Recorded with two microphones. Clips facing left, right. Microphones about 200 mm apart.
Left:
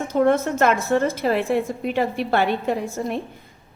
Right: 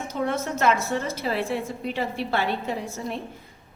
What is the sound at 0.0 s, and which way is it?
A woman's voice, 50° left (ahead or behind).